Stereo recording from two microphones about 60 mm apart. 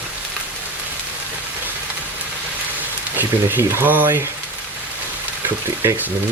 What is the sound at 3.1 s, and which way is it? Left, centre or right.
Speech, right.